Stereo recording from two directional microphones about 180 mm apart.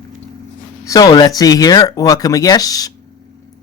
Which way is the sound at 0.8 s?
20° left (ahead or behind).